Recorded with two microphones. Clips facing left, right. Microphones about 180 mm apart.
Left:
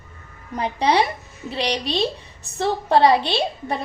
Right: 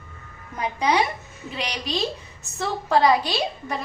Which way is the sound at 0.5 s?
30° left (ahead or behind).